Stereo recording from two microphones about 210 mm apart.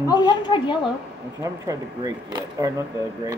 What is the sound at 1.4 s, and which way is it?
Speech, 15° right (ahead or behind).